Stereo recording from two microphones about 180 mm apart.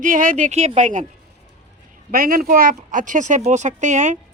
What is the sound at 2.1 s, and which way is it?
Speech, 55° right (ahead or behind).